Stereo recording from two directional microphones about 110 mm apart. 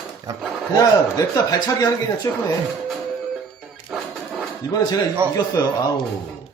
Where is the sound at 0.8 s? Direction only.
35° left (ahead or behind).